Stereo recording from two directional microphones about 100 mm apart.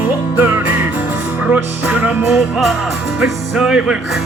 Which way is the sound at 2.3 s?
5° right (ahead or behind).